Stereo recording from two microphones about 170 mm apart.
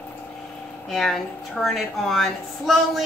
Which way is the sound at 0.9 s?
Centre (ahead or behind).